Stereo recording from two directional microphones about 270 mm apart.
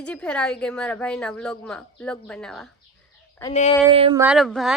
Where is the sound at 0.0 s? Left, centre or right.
Centre.